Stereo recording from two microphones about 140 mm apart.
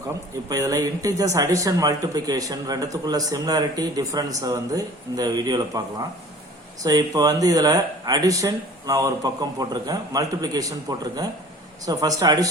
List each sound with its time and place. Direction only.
0.4 s speech: 25° right (ahead or behind)